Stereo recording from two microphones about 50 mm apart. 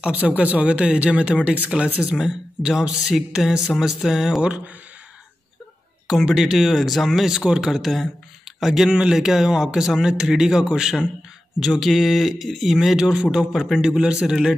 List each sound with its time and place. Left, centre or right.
0.4 s speech: right; by 4.4 s centre
6.2 s speech: centre
7.2 s speech: centre
7.7 s speech: centre
14.2 s speech: centre